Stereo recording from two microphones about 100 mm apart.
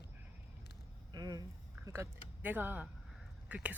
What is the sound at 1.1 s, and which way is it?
Speech, 40° right (ahead or behind).